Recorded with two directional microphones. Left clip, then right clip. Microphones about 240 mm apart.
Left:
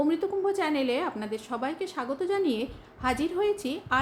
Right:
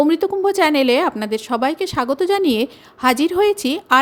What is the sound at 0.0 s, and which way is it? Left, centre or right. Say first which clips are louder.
A woman's voice: right 10 dB; right.